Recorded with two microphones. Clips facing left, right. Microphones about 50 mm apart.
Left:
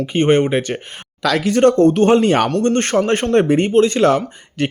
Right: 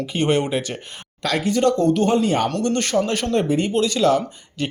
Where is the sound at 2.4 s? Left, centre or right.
Left.